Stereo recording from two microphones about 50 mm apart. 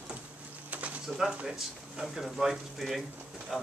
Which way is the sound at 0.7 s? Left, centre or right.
Right.